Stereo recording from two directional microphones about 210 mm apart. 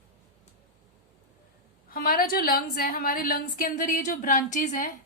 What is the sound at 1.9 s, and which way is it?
A woman's voice, 45° left (ahead or behind).